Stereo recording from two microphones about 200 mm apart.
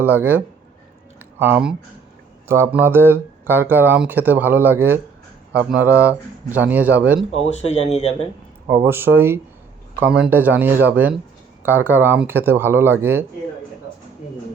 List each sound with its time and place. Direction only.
0.0 s speech: 10° right (ahead or behind)
7.5 s speech: 30° left (ahead or behind)
8.6 s speech: 10° right (ahead or behind)